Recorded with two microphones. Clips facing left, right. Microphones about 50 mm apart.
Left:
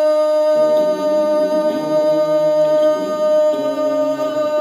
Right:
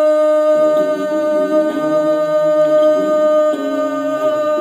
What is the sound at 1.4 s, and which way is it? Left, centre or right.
Music, centre.